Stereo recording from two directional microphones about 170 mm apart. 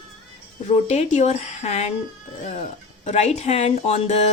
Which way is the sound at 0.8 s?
40° left (ahead or behind).